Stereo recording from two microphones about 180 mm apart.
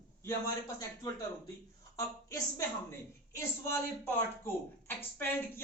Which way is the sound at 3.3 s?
15° left (ahead or behind).